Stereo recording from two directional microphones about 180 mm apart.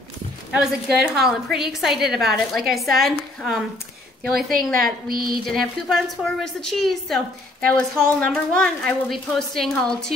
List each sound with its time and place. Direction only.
0.5 s a woman's voice: 5° right (ahead or behind)
5.0 s speech: 55° right (ahead or behind)
5.5 s a woman's voice: centre (ahead or behind)